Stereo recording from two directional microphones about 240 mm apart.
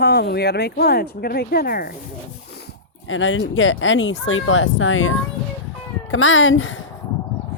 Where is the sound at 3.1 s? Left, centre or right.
Left.